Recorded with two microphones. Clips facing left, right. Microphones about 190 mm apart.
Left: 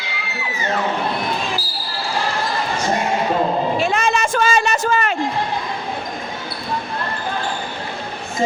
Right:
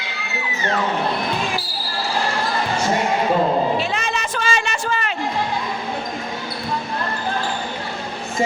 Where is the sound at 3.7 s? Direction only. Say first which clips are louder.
Left 4 dB; 50° left (ahead or behind).